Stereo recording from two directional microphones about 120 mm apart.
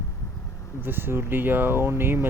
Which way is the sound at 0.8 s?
15° right (ahead or behind).